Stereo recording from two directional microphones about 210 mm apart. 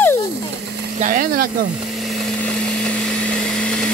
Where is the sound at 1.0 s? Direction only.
40° right (ahead or behind).